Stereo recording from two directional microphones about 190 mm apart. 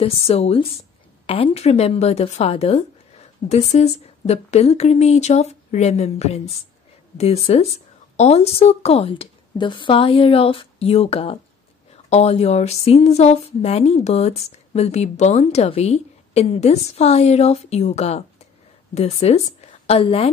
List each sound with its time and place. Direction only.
0.0 s speech: 30° left (ahead or behind)